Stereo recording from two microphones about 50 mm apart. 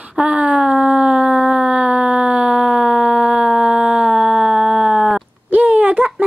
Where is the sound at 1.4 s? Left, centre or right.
Right.